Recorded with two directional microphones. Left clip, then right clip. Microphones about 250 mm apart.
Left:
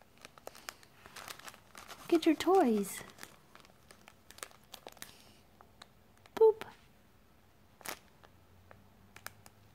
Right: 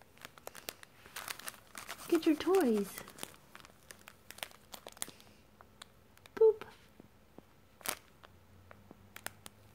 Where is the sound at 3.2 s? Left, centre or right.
Centre.